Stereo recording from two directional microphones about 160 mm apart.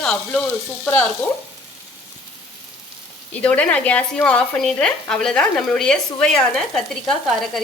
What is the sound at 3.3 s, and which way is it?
Speech, 10° left (ahead or behind).